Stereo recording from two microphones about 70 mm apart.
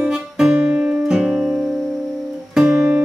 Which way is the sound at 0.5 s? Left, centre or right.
Centre.